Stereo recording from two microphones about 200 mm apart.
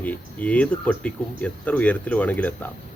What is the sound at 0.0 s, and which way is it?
Speech, 5° left (ahead or behind).